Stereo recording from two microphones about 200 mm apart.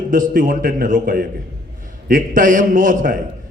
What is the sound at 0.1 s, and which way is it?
A man's voice, 40° right (ahead or behind).